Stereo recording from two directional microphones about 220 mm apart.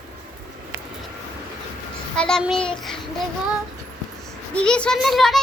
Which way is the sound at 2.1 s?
5° left (ahead or behind).